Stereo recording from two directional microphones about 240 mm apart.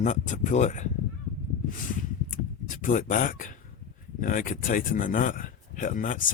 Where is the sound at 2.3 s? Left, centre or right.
Left.